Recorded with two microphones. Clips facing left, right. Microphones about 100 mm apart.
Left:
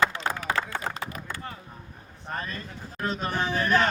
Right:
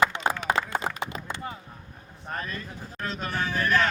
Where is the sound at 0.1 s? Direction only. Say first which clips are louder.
Right 2 dB; 20° right (ahead or behind).